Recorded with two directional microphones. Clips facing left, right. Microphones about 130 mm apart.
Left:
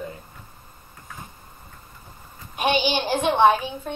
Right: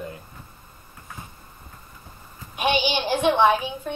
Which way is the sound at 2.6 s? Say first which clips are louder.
Left 1 dB; 45° left (ahead or behind).